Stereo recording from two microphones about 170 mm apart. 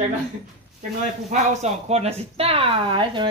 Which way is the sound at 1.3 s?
45° right (ahead or behind).